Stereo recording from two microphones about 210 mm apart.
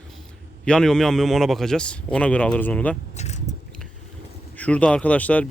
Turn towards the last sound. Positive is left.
turn(degrees=5)  # may be behind; listen again after turning